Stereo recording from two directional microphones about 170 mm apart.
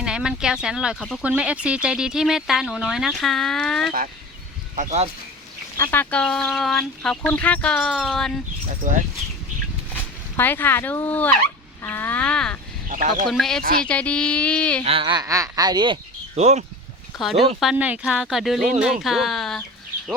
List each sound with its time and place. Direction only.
0.0 s speech: 5° right (ahead or behind)
4.7 s speech: 40° right (ahead or behind)
5.7 s speech: 15° left (ahead or behind)
8.8 s speech: 50° right (ahead or behind)
9.9 s speech: 10° left (ahead or behind)
12.9 s speech: 50° right (ahead or behind)
13.3 s speech: centre (ahead or behind)
13.6 s speech: 55° right (ahead or behind)
13.8 s speech: 5° left (ahead or behind)
14.8 s speech: 30° right (ahead or behind)
17.6 s speech: 5° right (ahead or behind)